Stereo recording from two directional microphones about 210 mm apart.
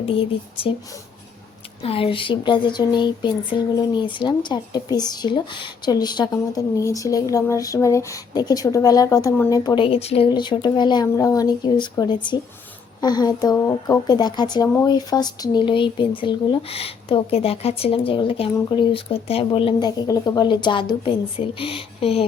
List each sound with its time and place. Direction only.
0.0 s speech: 25° left (ahead or behind)
1.8 s speech: 25° left (ahead or behind)